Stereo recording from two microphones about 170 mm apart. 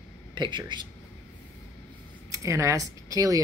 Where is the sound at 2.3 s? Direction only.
20° right (ahead or behind).